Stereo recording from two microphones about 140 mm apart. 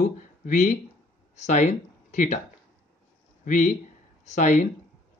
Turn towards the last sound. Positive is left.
turn(degrees=60)  # may be behind; listen again after turning